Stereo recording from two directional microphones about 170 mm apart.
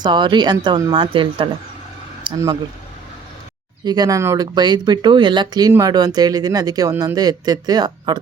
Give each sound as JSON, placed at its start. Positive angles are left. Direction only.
{"t": 0.0, "sound": "speech", "side_deg": -25}
{"t": 3.8, "sound": "speech", "side_deg": -25}